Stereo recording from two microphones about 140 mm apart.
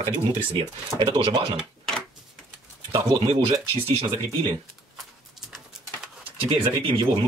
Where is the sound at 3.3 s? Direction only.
45° right (ahead or behind).